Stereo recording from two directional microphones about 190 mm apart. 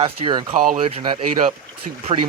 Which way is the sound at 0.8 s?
25° right (ahead or behind).